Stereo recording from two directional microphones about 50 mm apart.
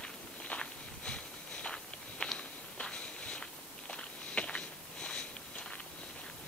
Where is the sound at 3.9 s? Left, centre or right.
Left.